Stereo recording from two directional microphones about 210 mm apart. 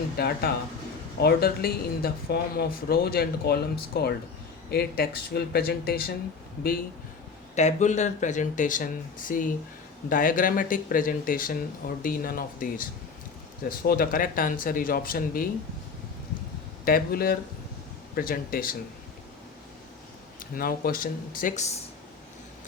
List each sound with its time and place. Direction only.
0.2 s speech: 50° left (ahead or behind)
7.5 s speech: 35° left (ahead or behind)
16.8 s speech: 45° left (ahead or behind)
20.6 s speech: 45° left (ahead or behind)